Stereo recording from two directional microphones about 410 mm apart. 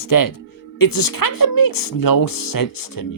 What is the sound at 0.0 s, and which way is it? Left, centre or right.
Speech, left.